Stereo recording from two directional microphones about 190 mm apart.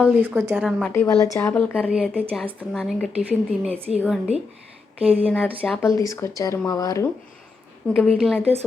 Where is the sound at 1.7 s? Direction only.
5° right (ahead or behind).